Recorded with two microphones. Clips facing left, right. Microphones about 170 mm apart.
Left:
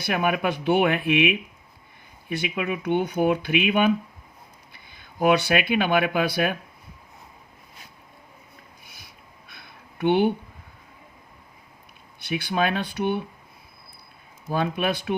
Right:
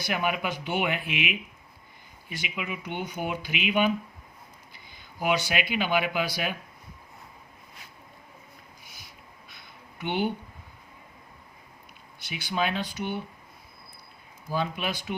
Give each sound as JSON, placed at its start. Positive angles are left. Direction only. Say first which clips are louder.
{"t": 0.0, "sound": "speech", "louder": "left 5 dB", "side_deg": 60}
{"t": 2.3, "sound": "speech", "louder": "left 8 dB", "side_deg": 60}
{"t": 8.9, "sound": "a sound", "louder": "even", "side_deg": 60}
{"t": 12.3, "sound": "speech", "louder": "left 5 dB", "side_deg": 60}
{"t": 14.5, "sound": "speech", "louder": "left 5 dB", "side_deg": 60}